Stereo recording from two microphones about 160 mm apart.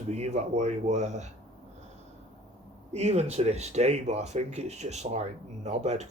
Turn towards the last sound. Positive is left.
turn(degrees=-45)  # may be behind; listen again after turning